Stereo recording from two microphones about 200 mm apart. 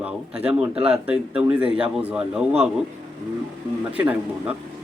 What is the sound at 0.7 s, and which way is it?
Speech, 30° right (ahead or behind).